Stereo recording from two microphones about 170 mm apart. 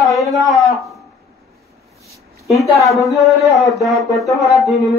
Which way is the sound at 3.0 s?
Centre (ahead or behind).